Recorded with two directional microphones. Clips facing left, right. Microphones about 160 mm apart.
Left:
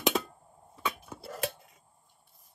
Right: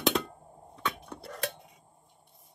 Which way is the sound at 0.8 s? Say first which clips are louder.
Even; 5° left (ahead or behind).